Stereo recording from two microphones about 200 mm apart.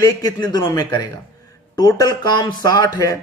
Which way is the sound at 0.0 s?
20° left (ahead or behind).